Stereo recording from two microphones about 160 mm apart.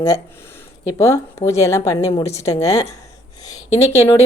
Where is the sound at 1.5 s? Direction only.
20° left (ahead or behind).